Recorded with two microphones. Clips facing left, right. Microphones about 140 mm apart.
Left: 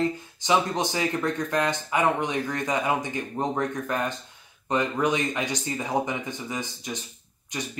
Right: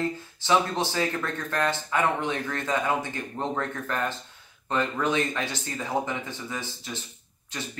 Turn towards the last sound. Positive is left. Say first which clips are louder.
# left 3 dB
turn(degrees=15)  # may be behind; listen again after turning